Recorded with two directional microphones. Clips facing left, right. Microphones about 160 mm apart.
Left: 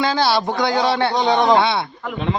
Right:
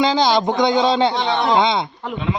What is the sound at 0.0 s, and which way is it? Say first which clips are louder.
A man's voice: right 2 dB; 15° right (ahead or behind).